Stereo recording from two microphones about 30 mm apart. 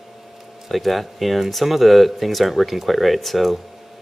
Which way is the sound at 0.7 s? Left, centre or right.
Centre.